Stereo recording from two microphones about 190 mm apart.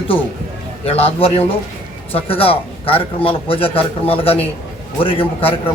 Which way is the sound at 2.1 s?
30° left (ahead or behind).